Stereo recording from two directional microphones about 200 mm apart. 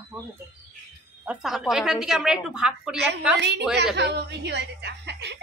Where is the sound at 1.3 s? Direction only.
Centre (ahead or behind).